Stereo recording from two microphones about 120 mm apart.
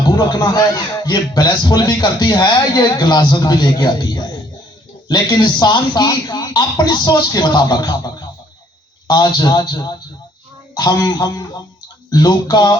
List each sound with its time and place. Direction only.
0.1 s a man's voice: 35° left (ahead or behind)